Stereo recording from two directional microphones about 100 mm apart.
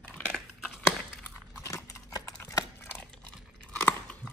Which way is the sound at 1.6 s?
30° left (ahead or behind).